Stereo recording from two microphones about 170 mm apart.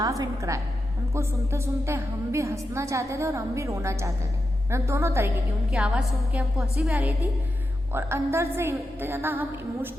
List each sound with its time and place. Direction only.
0.0 s a woman's voice: 20° right (ahead or behind)
5.7 s a woman's voice: 5° right (ahead or behind)